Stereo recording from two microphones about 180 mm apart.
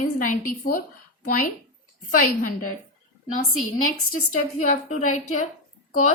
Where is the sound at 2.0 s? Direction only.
50° left (ahead or behind).